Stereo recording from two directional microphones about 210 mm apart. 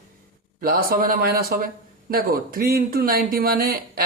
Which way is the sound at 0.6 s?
45° right (ahead or behind).